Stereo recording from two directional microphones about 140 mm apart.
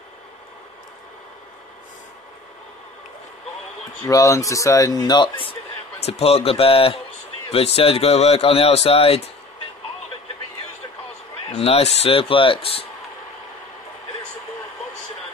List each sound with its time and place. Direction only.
4.0 s a man's voice: 25° left (ahead or behind); by 9.3 s 45° left (ahead or behind)
11.5 s speech: 45° left (ahead or behind)